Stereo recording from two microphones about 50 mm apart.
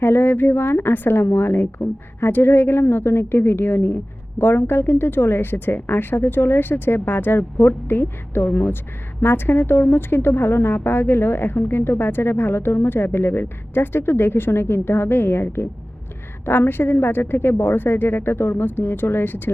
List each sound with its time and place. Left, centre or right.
0.0 s speech: left